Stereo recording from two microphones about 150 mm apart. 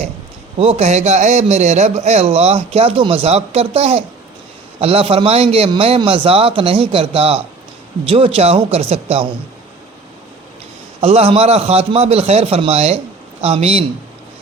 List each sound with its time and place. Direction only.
0.6 s a man's voice: 45° right (ahead or behind)
11.0 s a man's voice: 45° right (ahead or behind)